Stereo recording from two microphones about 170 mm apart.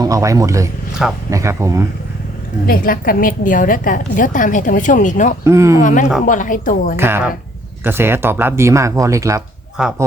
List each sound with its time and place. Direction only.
0.0 s speech: 20° right (ahead or behind)
2.6 s a woman's voice: 60° left (ahead or behind)
5.5 s speech: 15° right (ahead or behind)
5.8 s a woman's voice: 50° left (ahead or behind)
6.9 s speech: 15° right (ahead or behind)
9.8 s speech: 5° right (ahead or behind)